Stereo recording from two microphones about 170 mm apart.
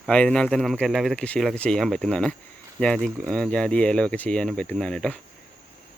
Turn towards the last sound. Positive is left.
turn(degrees=5)  # may be behind; listen again after turning